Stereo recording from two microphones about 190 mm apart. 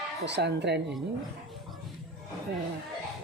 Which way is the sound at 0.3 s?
65° right (ahead or behind).